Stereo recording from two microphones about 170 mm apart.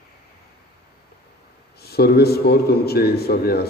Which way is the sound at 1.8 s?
70° left (ahead or behind).